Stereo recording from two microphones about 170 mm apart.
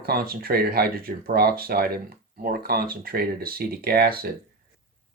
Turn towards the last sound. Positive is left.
turn(degrees=-65)  # may be behind; listen again after turning